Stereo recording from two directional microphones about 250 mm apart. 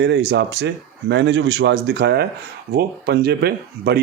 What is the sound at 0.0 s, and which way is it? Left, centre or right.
Speech, right.